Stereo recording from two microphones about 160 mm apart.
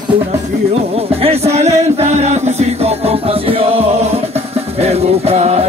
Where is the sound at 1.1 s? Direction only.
40° right (ahead or behind).